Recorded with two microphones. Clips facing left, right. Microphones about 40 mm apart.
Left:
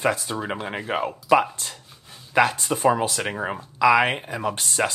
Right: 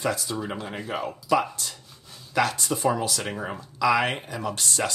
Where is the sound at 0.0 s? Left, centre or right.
Left.